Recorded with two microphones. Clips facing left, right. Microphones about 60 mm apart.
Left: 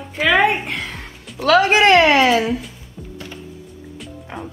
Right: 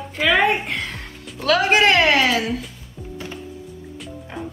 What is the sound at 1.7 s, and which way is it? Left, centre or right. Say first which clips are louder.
Speech: left 1 dB; left.